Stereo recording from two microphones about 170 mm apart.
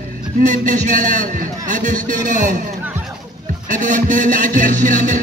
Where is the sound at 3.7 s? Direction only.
50° right (ahead or behind).